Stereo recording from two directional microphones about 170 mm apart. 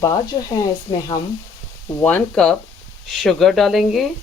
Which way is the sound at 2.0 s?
10° left (ahead or behind).